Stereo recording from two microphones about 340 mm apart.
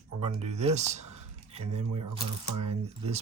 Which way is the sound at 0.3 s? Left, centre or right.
Centre.